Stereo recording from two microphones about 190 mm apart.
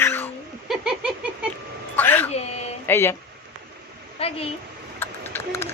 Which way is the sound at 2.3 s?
35° left (ahead or behind).